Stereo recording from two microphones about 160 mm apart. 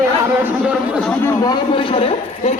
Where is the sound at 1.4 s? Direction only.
30° left (ahead or behind).